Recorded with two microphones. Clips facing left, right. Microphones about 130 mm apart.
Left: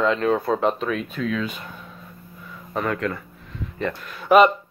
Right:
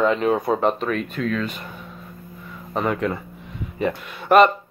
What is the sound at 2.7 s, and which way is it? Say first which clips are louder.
Speech: right 2 dB; 20° right (ahead or behind).